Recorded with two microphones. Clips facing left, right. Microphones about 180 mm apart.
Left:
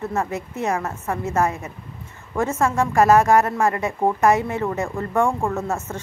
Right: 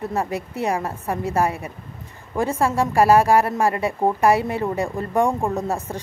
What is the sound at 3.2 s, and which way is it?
A woman's voice, 30° right (ahead or behind).